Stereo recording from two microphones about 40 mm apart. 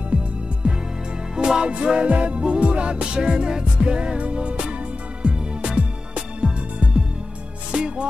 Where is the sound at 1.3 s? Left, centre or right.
Centre.